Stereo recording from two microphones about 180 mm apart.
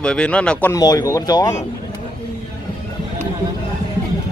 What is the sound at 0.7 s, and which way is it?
Speech, 20° left (ahead or behind).